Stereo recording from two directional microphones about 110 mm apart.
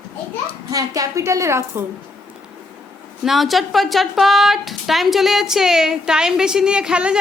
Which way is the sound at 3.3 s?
Centre (ahead or behind).